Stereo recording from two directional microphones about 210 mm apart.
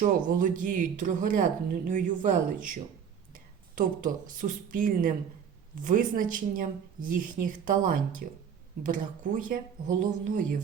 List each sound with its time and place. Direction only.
0.0 s speech: 40° right (ahead or behind)